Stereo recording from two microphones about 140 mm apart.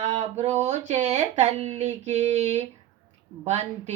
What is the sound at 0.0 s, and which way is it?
Speech, 50° right (ahead or behind).